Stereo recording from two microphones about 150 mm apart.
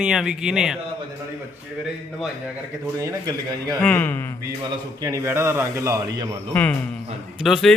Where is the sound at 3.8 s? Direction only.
10° left (ahead or behind).